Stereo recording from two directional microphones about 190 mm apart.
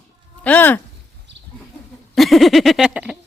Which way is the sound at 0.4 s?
10° left (ahead or behind).